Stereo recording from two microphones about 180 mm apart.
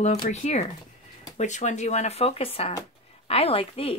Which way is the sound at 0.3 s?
35° left (ahead or behind).